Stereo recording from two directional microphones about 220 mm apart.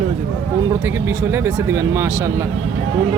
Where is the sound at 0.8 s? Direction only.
10° right (ahead or behind).